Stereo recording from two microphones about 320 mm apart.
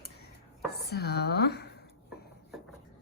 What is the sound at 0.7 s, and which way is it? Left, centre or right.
Speech, left.